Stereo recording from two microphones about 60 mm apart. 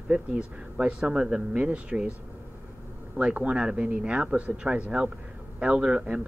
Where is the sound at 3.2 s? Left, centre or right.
Right.